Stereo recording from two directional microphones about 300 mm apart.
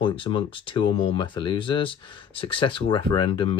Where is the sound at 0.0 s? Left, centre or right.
Centre.